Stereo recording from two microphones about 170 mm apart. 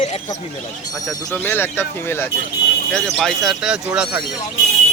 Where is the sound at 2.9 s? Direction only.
5° left (ahead or behind).